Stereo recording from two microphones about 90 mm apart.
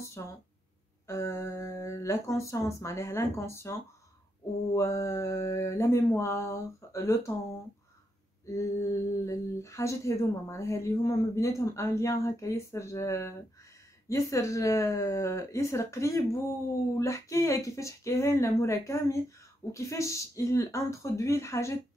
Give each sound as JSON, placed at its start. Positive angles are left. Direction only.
{"t": 0.2, "sound": "speech", "side_deg": 40}
{"t": 4.7, "sound": "speech", "side_deg": 35}
{"t": 8.5, "sound": "speech", "side_deg": 30}